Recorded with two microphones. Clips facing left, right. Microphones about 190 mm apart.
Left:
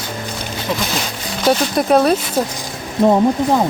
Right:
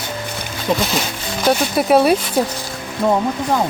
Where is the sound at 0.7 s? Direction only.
45° right (ahead or behind).